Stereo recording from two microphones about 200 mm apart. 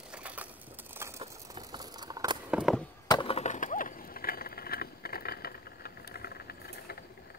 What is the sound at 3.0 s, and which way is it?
Skateboard, 25° left (ahead or behind).